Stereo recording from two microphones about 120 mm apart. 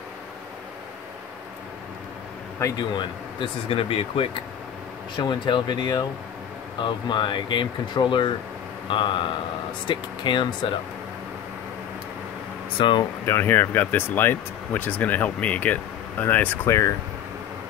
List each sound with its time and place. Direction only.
2.8 s speech: 45° left (ahead or behind)
12.7 s speech: 40° left (ahead or behind)
13.2 s speech: 20° left (ahead or behind)